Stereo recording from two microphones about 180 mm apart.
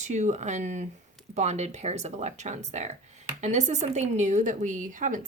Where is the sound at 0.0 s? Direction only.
40° right (ahead or behind).